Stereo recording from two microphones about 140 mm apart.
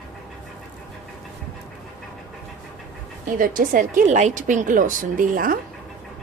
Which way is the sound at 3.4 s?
80° right.